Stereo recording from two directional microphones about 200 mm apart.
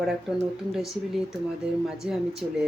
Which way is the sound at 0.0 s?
Centre (ahead or behind).